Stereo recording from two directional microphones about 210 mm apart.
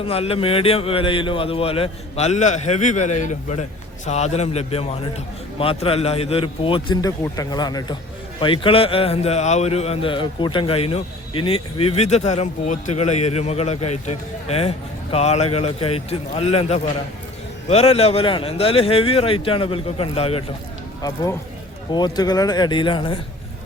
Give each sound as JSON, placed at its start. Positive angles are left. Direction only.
{"t": 0.0, "sound": "a man's voice", "side_deg": 25}
{"t": 21.9, "sound": "a man's voice", "side_deg": 20}